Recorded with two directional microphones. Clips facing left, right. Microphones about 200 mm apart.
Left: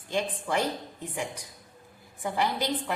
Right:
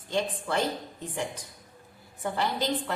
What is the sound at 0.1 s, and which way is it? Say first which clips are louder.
Speech: even; 15° left (ahead or behind).